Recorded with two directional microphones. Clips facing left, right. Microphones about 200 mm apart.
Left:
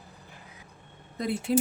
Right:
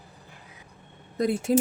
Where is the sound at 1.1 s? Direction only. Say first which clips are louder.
Right 4 dB; 45° right (ahead or behind).